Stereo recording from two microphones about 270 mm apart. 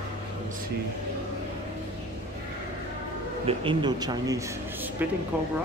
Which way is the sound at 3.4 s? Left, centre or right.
Centre.